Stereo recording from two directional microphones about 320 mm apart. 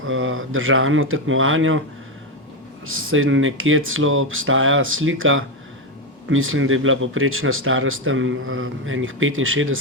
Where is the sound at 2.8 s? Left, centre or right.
Right.